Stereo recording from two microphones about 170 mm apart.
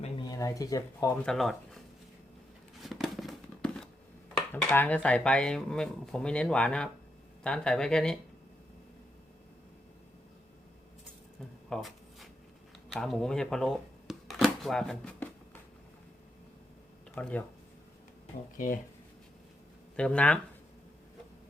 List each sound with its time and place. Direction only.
0.3 s speech: 20° left (ahead or behind)
1.2 s speech: centre (ahead or behind)
2.8 s a sound: centre (ahead or behind)
4.5 s speech: 10° left (ahead or behind)
11.7 s a sound: centre (ahead or behind)
17.2 s speech: 5° left (ahead or behind)
18.5 s speech: 50° left (ahead or behind)
20.0 s speech: 5° left (ahead or behind)